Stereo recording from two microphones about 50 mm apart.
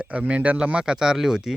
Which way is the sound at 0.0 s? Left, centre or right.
Right.